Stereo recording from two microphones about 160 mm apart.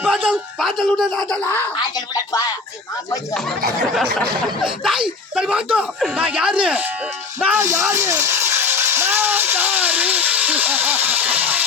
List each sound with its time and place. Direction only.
0.0 s a sound: 5° right (ahead or behind)
0.9 s speech: centre (ahead or behind)
2.1 s speech: 20° left (ahead or behind)
3.9 s speech: centre (ahead or behind)